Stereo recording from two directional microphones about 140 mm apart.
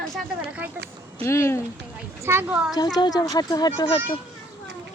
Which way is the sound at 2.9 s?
30° left (ahead or behind).